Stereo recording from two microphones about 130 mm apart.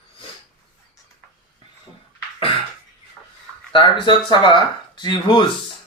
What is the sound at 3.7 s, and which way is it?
Speech, 40° left (ahead or behind).